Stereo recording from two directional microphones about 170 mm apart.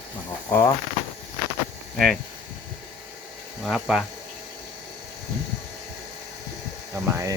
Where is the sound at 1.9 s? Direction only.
Centre (ahead or behind).